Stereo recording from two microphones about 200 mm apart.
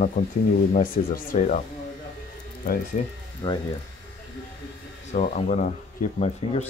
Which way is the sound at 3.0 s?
35° left (ahead or behind).